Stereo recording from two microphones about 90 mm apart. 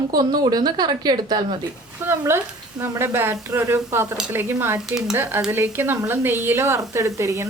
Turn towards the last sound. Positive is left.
turn(degrees=-35)  # may be behind; listen again after turning